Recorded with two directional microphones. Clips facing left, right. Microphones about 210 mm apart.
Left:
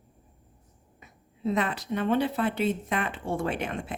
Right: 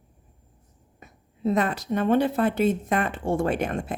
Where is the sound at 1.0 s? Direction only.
45° right (ahead or behind).